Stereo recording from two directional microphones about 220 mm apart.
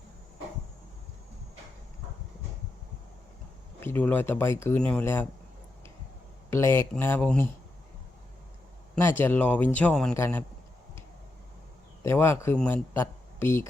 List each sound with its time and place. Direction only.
3.8 s a man's voice: 10° left (ahead or behind)
6.5 s a man's voice: 10° left (ahead or behind)
9.0 s a man's voice: 10° left (ahead or behind)
12.0 s a man's voice: 10° left (ahead or behind)